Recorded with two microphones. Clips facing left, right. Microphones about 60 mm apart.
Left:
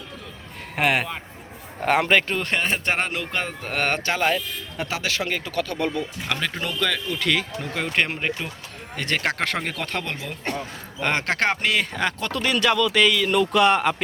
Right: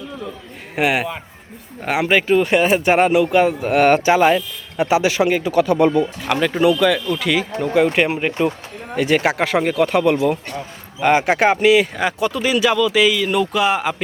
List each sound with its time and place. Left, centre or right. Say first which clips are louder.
0.8 s speech: right 3 dB; centre
6.4 s speech: right 13 dB; centre